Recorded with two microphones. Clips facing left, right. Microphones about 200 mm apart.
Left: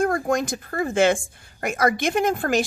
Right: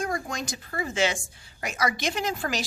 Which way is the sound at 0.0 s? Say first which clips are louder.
Left 9 dB; 55° left (ahead or behind).